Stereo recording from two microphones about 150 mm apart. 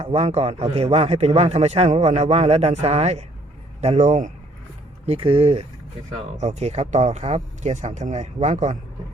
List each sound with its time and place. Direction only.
0.0 s a man's voice: 45° right (ahead or behind)
5.0 s a man's voice: 35° right (ahead or behind); by 8.8 s 55° right (ahead or behind)